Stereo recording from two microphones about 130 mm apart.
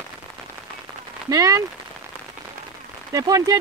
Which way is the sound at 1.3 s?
30° right (ahead or behind).